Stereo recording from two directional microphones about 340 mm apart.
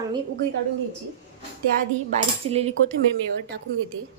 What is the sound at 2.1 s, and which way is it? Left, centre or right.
Cutlery, centre.